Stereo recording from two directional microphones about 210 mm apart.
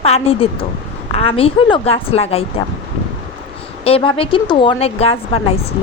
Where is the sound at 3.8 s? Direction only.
25° left (ahead or behind).